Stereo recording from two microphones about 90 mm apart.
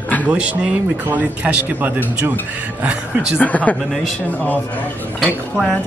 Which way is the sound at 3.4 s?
15° left (ahead or behind).